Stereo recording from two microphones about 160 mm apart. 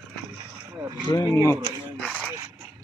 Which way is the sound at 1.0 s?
20° left (ahead or behind).